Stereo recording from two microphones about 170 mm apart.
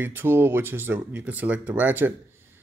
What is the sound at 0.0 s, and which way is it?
Speech, 10° right (ahead or behind).